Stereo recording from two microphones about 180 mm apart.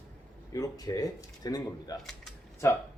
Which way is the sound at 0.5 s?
20° left (ahead or behind).